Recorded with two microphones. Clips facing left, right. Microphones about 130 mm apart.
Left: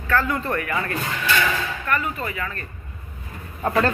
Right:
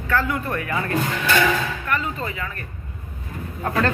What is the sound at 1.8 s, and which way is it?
Speech, 20° right (ahead or behind).